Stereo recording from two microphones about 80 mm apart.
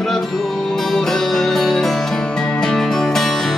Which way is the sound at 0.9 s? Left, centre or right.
Centre.